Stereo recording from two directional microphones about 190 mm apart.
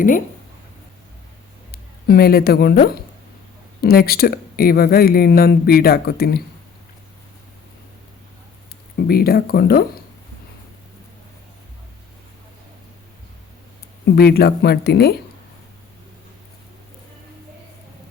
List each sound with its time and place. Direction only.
1.7 s speech: 55° left (ahead or behind)
9.0 s speech: 55° left (ahead or behind)
14.0 s speech: 55° left (ahead or behind)